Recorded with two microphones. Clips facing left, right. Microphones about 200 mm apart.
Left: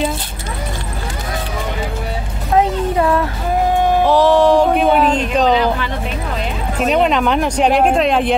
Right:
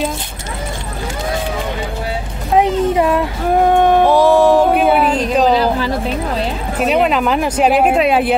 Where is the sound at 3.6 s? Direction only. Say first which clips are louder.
Right 3 dB; 60° right (ahead or behind).